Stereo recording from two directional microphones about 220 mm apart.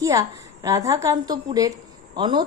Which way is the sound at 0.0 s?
15° right (ahead or behind).